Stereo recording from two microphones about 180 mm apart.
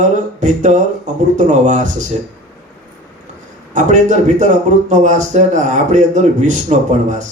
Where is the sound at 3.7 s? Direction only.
45° right (ahead or behind).